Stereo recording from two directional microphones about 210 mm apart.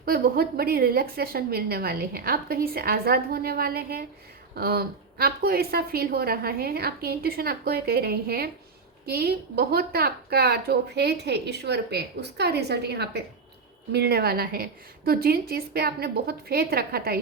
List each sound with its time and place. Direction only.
0.0 s a woman's voice: 45° right (ahead or behind)